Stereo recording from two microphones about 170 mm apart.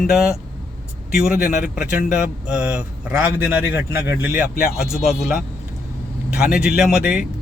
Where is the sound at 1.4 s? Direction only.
60° left (ahead or behind).